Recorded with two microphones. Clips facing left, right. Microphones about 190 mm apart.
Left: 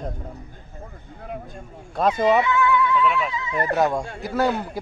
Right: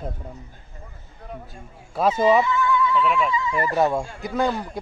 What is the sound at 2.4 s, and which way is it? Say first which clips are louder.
Speech: left 1 dB; 65° left (ahead or behind).